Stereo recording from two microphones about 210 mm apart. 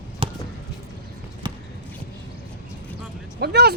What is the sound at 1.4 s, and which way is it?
Basketball bounce, 20° right (ahead or behind).